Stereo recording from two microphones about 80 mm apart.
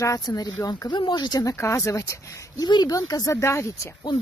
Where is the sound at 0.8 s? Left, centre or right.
Left.